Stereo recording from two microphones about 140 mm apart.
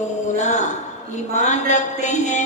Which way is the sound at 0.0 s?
60° left (ahead or behind).